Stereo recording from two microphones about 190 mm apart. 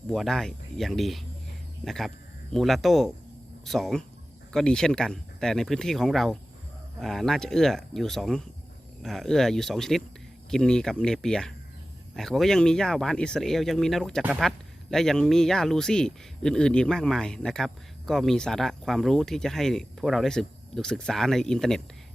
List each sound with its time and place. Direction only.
0.1 s speech: centre (ahead or behind)